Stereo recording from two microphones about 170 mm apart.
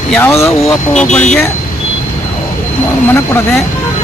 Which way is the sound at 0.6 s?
5° left (ahead or behind).